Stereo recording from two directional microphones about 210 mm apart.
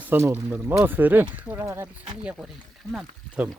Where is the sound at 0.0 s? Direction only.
10° right (ahead or behind).